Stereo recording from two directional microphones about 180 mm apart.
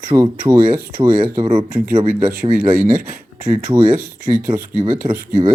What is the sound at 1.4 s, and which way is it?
Speech, 25° right (ahead or behind).